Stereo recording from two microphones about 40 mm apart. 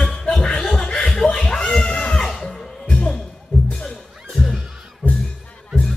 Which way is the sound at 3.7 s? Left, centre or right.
Left.